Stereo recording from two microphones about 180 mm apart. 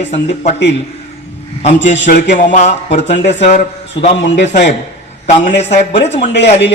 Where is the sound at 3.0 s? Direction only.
80° left.